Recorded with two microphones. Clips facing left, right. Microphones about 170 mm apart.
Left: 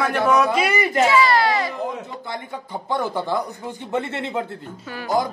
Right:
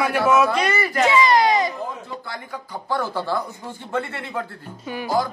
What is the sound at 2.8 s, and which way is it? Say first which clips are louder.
A man's voice: left 1 dB; 20° left (ahead or behind).